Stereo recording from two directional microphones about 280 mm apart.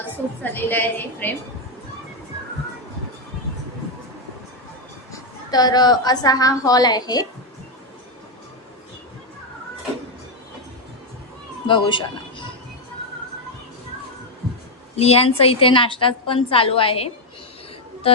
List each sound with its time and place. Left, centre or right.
0.0 s a woman's voice: centre
5.5 s a woman's voice: centre
11.7 s speech: centre
14.9 s a woman's voice: left